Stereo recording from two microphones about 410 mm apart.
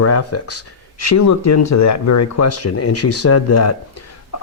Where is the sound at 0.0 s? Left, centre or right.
Left.